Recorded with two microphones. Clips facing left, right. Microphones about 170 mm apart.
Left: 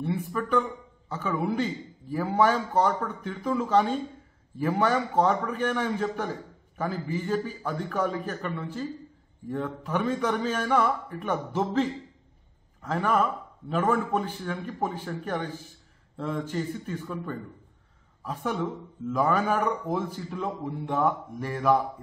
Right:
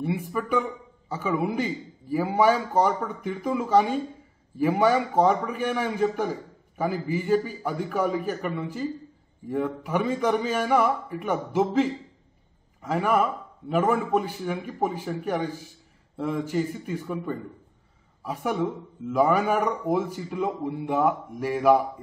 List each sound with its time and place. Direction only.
0.0 s a man's voice: 10° right (ahead or behind)